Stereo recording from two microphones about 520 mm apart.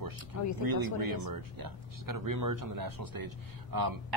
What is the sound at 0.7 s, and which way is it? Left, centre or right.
A man's voice, right.